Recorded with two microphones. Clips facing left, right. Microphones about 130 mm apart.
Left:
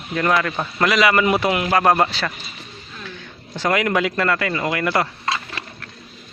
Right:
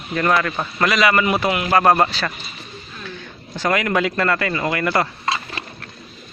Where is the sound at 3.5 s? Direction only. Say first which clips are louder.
Even; 20° left (ahead or behind).